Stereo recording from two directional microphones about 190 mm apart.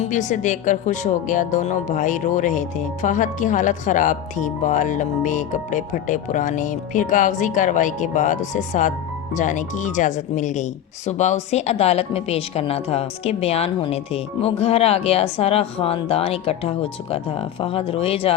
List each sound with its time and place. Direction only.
0.0 s speech: 40° left (ahead or behind)